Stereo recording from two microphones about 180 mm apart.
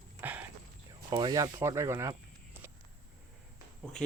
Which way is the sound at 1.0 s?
25° right (ahead or behind).